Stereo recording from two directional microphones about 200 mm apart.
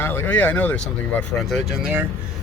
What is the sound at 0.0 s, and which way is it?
Speech, 10° left (ahead or behind).